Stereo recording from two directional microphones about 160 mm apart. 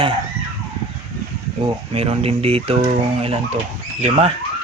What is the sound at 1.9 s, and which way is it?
Speech, 40° right (ahead or behind).